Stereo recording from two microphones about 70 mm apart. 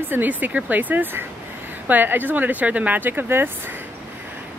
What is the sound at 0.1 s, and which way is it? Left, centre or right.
Speech, right.